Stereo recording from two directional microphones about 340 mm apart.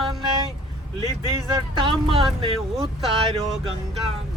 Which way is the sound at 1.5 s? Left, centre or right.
Centre.